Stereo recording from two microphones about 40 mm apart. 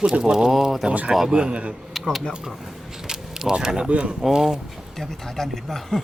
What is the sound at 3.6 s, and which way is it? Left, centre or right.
Speech, centre.